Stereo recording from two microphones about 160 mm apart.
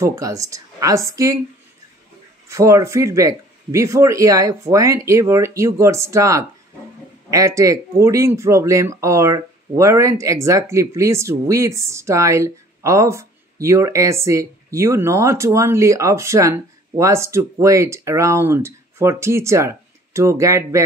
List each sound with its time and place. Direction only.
0.0 s speech: 20° right (ahead or behind)
2.4 s speech: 20° right (ahead or behind)